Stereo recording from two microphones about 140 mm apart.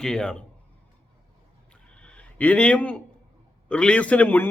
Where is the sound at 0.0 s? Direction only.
5° left (ahead or behind).